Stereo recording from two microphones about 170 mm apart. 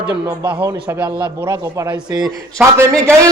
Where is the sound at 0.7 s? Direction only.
15° right (ahead or behind).